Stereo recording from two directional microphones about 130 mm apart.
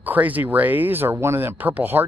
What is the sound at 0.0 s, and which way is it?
Speech, 10° right (ahead or behind).